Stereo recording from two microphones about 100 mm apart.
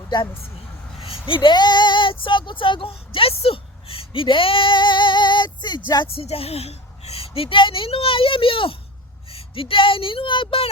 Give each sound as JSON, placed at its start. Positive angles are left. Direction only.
{"t": 1.3, "sound": "speech", "side_deg": 55}
{"t": 6.1, "sound": "a woman's voice", "side_deg": 75}